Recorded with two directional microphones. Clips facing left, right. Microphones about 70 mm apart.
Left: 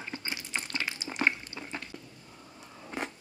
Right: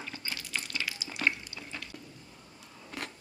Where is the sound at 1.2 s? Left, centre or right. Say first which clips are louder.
Left 2 dB; left.